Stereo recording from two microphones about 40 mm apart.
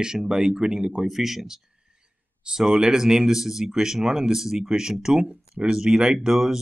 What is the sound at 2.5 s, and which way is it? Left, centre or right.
Speech, centre.